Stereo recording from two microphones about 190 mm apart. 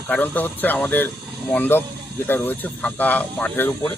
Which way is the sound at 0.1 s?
10° left (ahead or behind).